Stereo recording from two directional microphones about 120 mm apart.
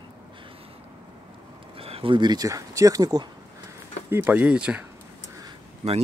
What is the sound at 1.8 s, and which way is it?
Speech, 55° right (ahead or behind).